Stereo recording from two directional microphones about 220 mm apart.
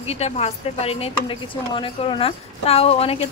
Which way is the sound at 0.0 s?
30° left (ahead or behind).